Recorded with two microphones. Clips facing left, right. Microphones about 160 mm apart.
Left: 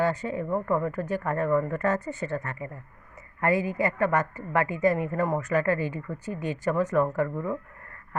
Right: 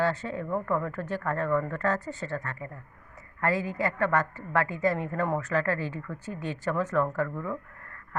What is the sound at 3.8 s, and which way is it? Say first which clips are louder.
Speech: left 2 dB; 15° left (ahead or behind).